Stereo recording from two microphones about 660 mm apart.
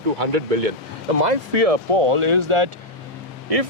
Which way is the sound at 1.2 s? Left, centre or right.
Right.